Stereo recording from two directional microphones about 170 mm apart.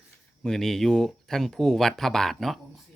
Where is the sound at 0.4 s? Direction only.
5° left (ahead or behind).